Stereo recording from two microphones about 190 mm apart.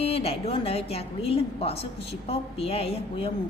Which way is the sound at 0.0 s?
30° left (ahead or behind).